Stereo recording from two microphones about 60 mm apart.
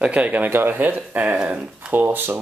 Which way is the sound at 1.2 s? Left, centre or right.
Centre.